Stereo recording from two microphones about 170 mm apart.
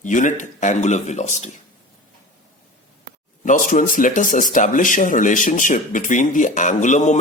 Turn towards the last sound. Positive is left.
turn(degrees=45)  # may be behind; listen again after turning